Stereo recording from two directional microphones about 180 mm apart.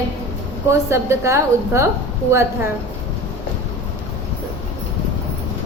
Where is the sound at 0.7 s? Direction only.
15° right (ahead or behind).